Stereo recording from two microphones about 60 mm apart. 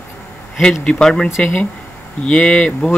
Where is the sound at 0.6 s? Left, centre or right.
Centre.